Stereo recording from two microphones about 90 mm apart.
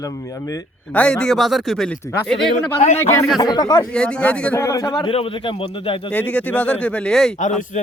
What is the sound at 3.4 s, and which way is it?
Speech, 50° left (ahead or behind).